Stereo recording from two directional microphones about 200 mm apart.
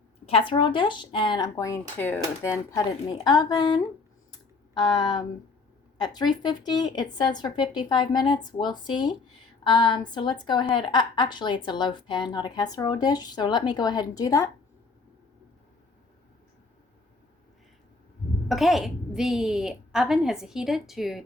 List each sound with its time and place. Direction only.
0.3 s a woman's voice: 25° left (ahead or behind)
18.4 s a woman's voice: centre (ahead or behind)